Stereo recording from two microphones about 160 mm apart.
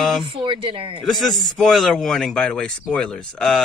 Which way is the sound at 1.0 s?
Centre (ahead or behind).